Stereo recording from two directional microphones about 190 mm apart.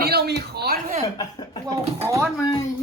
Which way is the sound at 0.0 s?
55° right (ahead or behind).